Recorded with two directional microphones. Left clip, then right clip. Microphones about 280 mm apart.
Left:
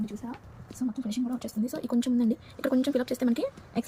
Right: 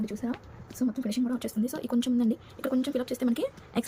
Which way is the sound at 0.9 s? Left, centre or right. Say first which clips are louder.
Right 1 dB; centre.